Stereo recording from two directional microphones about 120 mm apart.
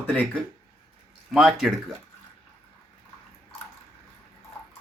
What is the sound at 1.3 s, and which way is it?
Speech, 5° right (ahead or behind).